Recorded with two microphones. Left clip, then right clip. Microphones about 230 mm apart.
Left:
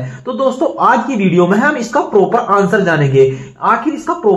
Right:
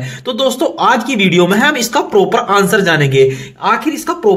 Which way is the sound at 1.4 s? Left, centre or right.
Right.